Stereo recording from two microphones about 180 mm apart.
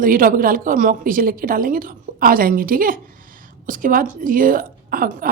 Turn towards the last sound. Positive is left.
turn(degrees=-55)  # may be behind; listen again after turning